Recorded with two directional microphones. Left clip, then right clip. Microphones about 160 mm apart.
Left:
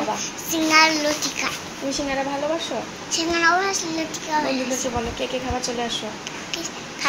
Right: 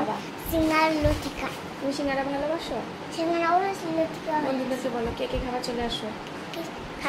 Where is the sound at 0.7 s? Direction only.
15° right (ahead or behind).